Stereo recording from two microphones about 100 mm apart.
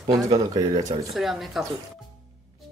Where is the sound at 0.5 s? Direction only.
40° right (ahead or behind).